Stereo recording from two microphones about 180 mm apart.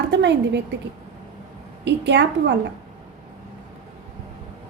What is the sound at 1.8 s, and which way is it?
Speech, 75° right (ahead or behind).